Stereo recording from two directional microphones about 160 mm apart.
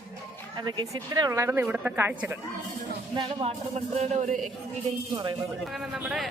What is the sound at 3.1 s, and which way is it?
Speech, 35° right (ahead or behind).